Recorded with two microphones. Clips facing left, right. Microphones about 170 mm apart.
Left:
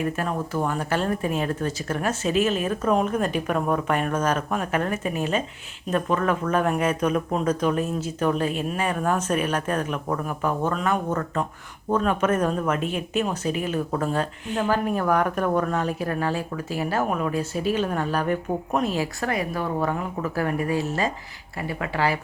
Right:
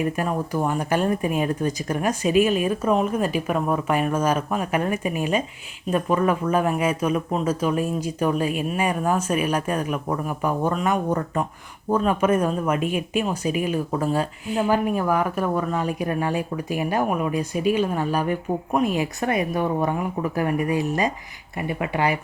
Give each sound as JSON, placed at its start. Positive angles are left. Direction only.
{"t": 0.0, "sound": "speech", "side_deg": -15}